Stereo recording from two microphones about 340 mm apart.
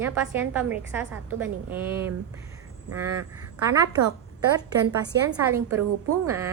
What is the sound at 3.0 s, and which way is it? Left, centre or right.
Speech, right.